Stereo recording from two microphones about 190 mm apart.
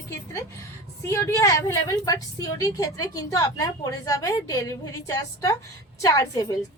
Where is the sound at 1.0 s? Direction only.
15° left (ahead or behind).